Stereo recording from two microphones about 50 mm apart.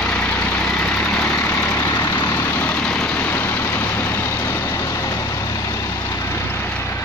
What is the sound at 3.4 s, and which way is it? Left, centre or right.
Vehicle, left.